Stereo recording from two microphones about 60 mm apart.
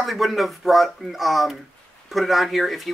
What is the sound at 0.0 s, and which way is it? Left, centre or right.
Speech, centre.